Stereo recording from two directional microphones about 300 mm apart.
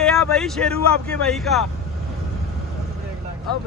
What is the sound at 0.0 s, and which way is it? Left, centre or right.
Speech, centre.